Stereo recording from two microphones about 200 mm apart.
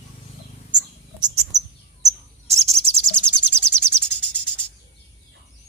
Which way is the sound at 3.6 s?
5° left (ahead or behind).